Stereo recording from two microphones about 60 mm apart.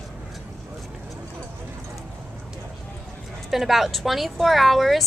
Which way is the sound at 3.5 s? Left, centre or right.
Centre.